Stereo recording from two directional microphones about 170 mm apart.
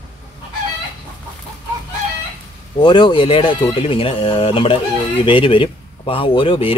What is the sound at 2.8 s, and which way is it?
Speech, 25° left (ahead or behind).